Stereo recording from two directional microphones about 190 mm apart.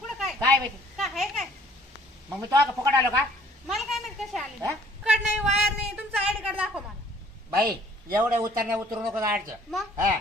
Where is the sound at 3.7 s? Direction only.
Centre (ahead or behind).